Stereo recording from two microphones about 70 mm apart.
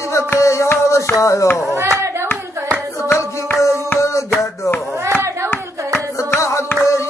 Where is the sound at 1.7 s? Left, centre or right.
Right.